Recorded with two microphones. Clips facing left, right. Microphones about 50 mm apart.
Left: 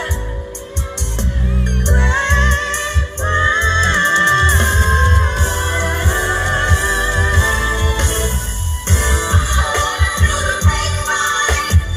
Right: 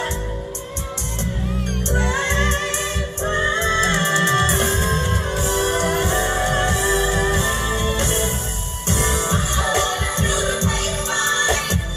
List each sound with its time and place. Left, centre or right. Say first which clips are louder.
1.8 s music: left 4 dB; left